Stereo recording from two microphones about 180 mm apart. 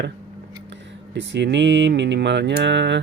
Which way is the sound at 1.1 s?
80° right.